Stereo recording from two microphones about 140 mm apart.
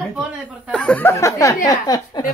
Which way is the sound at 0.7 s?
5° left (ahead or behind).